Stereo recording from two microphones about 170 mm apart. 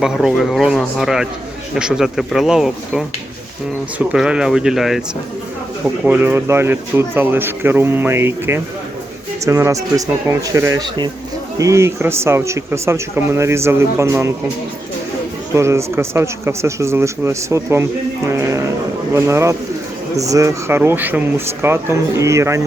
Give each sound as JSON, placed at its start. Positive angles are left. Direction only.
{"t": 0.0, "sound": "speech", "side_deg": -5}
{"t": 6.1, "sound": "speech", "side_deg": -10}
{"t": 15.5, "sound": "speech", "side_deg": -15}